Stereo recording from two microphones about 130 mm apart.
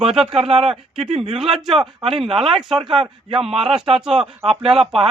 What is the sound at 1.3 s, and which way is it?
Speech, centre (ahead or behind).